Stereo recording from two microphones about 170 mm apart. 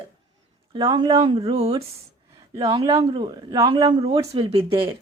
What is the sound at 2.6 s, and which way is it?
A woman's voice, 20° right (ahead or behind).